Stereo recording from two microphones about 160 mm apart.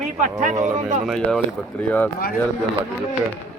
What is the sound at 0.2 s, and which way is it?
Speech, 50° right (ahead or behind).